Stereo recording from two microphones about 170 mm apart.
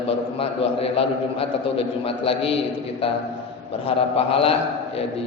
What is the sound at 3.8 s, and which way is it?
Speech, 35° left (ahead or behind).